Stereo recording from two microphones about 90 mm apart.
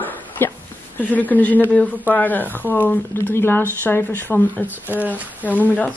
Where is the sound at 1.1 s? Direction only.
20° left (ahead or behind).